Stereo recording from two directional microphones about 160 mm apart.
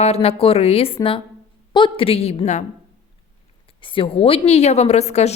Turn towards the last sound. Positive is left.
turn(degrees=45)  # may be behind; listen again after turning